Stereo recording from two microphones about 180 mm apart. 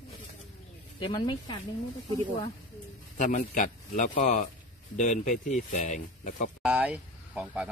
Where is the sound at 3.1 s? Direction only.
40° left (ahead or behind).